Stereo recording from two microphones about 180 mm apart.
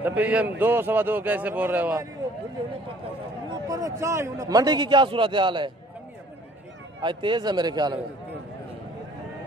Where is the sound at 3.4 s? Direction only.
20° right (ahead or behind).